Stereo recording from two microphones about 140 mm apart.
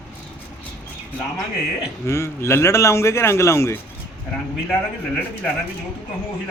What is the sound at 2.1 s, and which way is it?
A man's voice, 20° left (ahead or behind).